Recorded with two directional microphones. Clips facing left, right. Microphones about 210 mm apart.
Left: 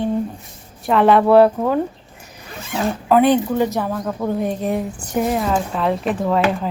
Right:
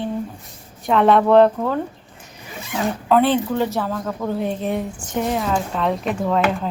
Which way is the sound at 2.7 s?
Centre (ahead or behind).